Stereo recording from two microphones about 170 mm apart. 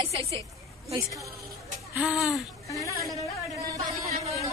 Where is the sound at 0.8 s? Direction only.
20° right (ahead or behind).